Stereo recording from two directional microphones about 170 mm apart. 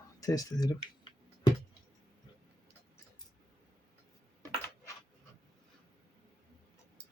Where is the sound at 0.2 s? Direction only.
20° left (ahead or behind).